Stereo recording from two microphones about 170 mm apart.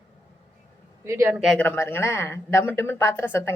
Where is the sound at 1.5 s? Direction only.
10° left (ahead or behind).